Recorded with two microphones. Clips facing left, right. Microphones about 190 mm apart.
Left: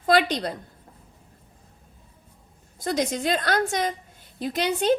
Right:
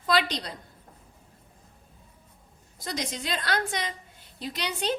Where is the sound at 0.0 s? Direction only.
50° left (ahead or behind).